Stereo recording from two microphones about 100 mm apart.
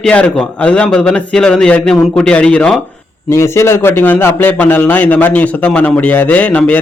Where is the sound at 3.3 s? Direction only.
25° left (ahead or behind).